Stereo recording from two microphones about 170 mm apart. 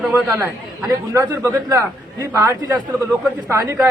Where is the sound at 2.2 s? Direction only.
15° right (ahead or behind).